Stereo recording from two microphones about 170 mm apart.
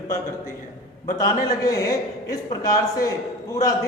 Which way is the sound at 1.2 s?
20° left (ahead or behind).